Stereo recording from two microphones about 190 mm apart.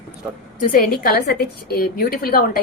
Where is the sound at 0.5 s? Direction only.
45° left (ahead or behind).